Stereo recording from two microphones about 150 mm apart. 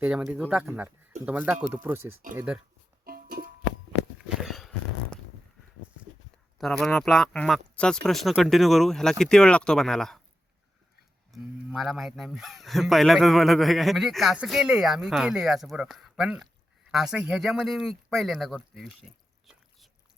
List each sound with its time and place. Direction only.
0.0 s speech: 10° right (ahead or behind)
3.0 s music: 90° right
4.4 s a sound: centre (ahead or behind)
6.6 s speech: centre (ahead or behind)
11.3 s speech: centre (ahead or behind)